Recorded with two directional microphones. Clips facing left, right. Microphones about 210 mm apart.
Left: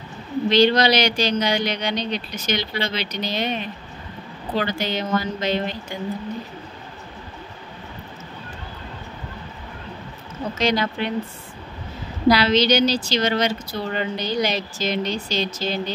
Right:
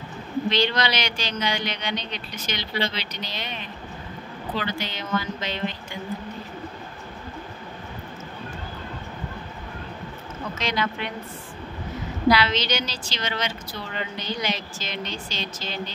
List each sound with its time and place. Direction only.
0.5 s a woman's voice: 40° left (ahead or behind)
4.6 s a woman's voice: 45° left (ahead or behind)
10.6 s a woman's voice: 35° left (ahead or behind)
12.3 s a woman's voice: 35° left (ahead or behind)